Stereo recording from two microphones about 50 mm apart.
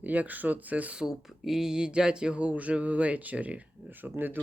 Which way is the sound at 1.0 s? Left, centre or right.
Centre.